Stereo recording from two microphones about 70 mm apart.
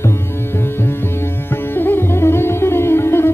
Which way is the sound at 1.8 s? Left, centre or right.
Left.